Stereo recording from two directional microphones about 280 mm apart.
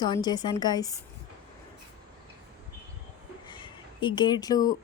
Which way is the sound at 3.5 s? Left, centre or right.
Centre.